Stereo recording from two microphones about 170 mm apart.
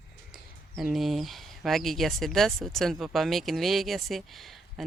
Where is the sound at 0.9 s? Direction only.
Centre (ahead or behind).